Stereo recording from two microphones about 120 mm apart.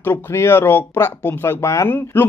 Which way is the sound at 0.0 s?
20° left (ahead or behind).